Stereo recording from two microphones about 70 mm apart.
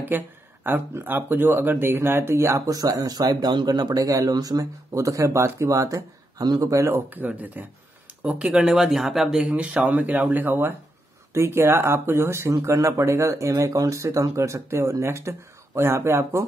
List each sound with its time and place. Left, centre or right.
0.1 s speech: right
2.7 s speech: right
4.9 s speech: right
6.6 s speech: right
7.2 s speech: right; by 9.5 s centre
9.5 s speech: centre
11.3 s speech: right